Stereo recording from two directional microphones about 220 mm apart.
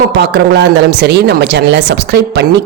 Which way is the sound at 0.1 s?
50° right (ahead or behind).